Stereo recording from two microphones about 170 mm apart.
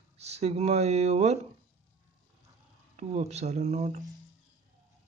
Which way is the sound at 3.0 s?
40° right (ahead or behind).